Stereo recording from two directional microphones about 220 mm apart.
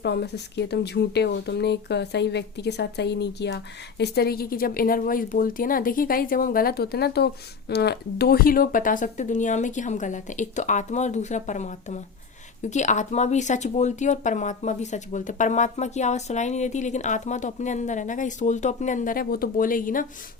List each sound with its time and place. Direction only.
0.0 s speech: 50° left (ahead or behind)